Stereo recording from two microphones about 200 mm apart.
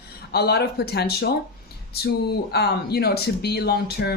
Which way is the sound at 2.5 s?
55° left (ahead or behind).